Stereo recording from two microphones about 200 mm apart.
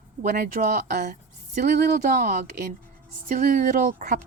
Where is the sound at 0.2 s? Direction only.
45° right (ahead or behind).